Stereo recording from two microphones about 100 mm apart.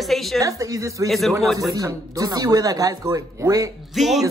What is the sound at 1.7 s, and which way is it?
A man's voice, 35° right (ahead or behind).